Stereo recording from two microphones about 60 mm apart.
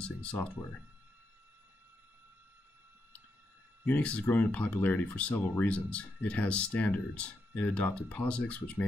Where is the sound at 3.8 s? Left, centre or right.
Left.